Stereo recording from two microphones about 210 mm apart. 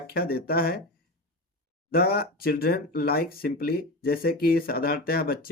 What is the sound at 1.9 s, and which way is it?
Speech, 45° left (ahead or behind).